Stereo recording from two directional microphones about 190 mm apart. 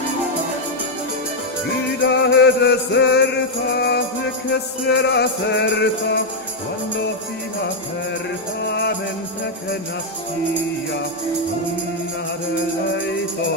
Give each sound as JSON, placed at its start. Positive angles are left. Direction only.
{"t": 2.0, "sound": "music", "side_deg": 65}
{"t": 8.6, "sound": "music", "side_deg": 60}